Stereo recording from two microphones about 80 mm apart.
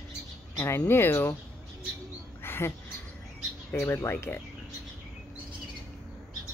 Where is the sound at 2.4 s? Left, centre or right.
Left.